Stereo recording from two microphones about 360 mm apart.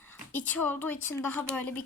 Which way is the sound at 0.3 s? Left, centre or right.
Centre.